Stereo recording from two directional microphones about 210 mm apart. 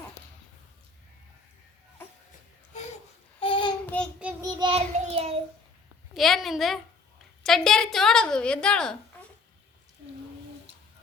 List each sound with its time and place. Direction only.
2.0 s music: 10° left (ahead or behind)
3.4 s child singing: 25° left (ahead or behind)
3.8 s child singing: 5° left (ahead or behind)
4.2 s child singing: 5° right (ahead or behind)
4.6 s child singing: 30° right (ahead or behind)
6.1 s a woman's voice: centre (ahead or behind)